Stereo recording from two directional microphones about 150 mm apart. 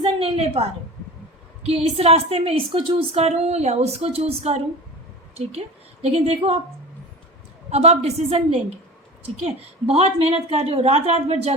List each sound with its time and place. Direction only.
0.0 s a sound: 40° right (ahead or behind)
1.6 s a woman's voice: 40° right (ahead or behind)
7.7 s a woman's voice: 45° right (ahead or behind)